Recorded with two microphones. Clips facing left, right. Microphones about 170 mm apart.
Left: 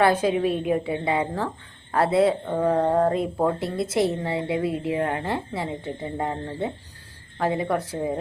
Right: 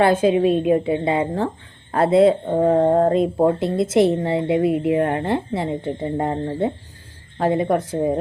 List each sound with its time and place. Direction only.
0.0 s a woman's voice: 25° right (ahead or behind)